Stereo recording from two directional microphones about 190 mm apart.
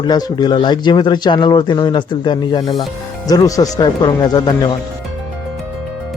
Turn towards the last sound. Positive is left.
turn(degrees=20)  # may be behind; listen again after turning